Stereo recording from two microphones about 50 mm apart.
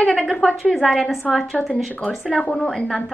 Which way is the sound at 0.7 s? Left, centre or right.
Centre.